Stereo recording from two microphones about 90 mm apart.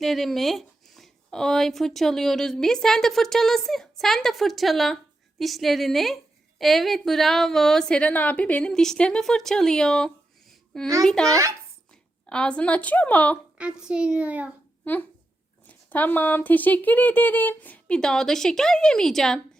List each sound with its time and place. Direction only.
0.0 s speech: centre (ahead or behind)
11.3 s a child's voice: 35° right (ahead or behind)
12.2 s speech: 10° left (ahead or behind)
13.6 s a child's voice: 10° right (ahead or behind)
15.9 s speech: 20° left (ahead or behind); by 19.4 s 5° left (ahead or behind)